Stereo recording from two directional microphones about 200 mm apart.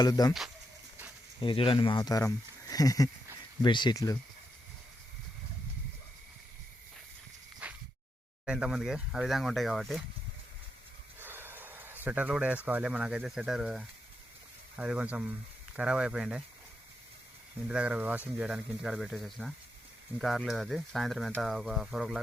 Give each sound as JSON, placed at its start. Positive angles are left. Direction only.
{"t": 0.0, "sound": "speech", "side_deg": 20}
{"t": 1.4, "sound": "speech", "side_deg": 25}
{"t": 7.6, "sound": "a sound", "side_deg": -5}
{"t": 8.4, "sound": "speech", "side_deg": -5}
{"t": 11.2, "sound": "snort", "side_deg": -10}
{"t": 12.0, "sound": "speech", "side_deg": -5}
{"t": 17.7, "sound": "speech", "side_deg": -5}